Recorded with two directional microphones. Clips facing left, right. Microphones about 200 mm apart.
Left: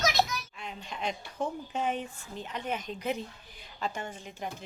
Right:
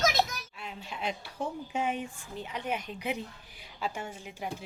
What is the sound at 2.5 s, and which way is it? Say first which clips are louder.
Speech: even; 10° right (ahead or behind).